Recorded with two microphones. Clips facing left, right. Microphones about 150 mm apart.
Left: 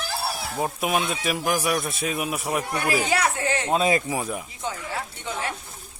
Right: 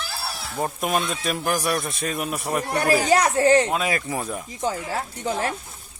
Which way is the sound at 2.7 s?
40° right (ahead or behind).